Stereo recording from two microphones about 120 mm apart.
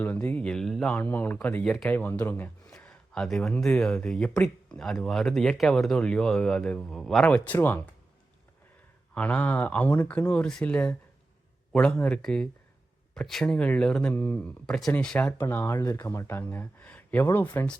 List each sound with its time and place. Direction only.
0.0 s speech: 15° left (ahead or behind)
1.6 s speech: 5° left (ahead or behind)
9.1 s speech: 10° left (ahead or behind)